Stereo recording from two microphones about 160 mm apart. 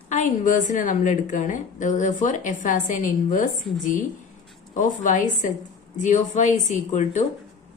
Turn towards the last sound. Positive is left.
turn(degrees=50)  # may be behind; listen again after turning